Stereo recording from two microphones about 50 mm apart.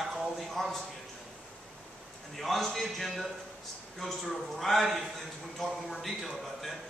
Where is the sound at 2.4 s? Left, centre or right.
Centre.